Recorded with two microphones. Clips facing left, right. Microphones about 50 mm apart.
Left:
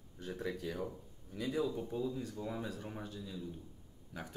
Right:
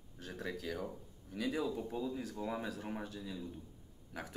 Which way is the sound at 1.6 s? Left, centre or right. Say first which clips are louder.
Left 1 dB; right.